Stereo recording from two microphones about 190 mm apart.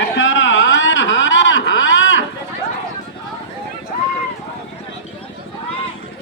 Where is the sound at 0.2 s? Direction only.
85° left.